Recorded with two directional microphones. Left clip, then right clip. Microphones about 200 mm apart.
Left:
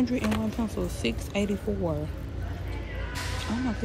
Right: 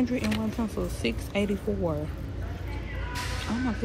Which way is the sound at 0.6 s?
10° left (ahead or behind).